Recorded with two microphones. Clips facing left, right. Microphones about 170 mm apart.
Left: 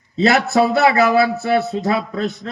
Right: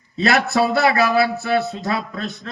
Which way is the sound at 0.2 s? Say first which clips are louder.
Left 3 dB; 25° left (ahead or behind).